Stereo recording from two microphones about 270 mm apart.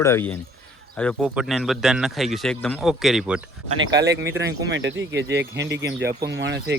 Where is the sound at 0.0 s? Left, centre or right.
Centre.